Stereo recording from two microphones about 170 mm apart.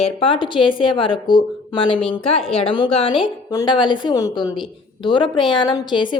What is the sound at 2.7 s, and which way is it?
A woman's voice, 25° left (ahead or behind).